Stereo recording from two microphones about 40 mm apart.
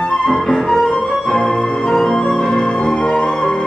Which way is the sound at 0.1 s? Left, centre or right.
Centre.